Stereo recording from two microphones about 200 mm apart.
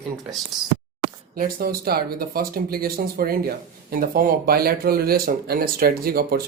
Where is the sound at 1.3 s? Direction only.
45° right (ahead or behind).